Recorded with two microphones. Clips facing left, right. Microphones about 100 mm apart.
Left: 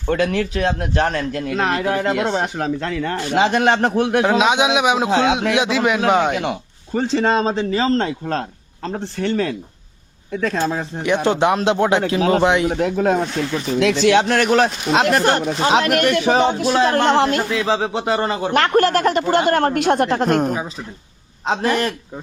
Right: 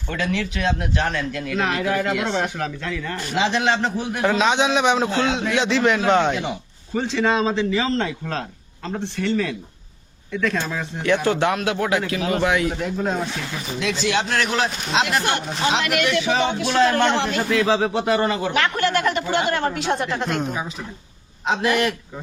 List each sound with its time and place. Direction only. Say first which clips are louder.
0.1 s speech: left 6 dB; 45° left (ahead or behind)
2.8 s speech: left 5 dB; 55° left (ahead or behind)
4.2 s a man's voice: even; 15° left (ahead or behind)
6.3 s speech: left 4 dB; 65° left (ahead or behind)
6.9 s speech: left 3 dB; 40° left (ahead or behind)
10.3 s speech: left 3 dB; 35° left (ahead or behind)
11.0 s a man's voice: left 2 dB; 20° left (ahead or behind)
12.7 s speech: left 6 dB; 60° left (ahead or behind); by 17.2 s 45° left (ahead or behind)
17.7 s speech: even; 25° left (ahead or behind)
18.5 s speech: left 6 dB; 45° left (ahead or behind)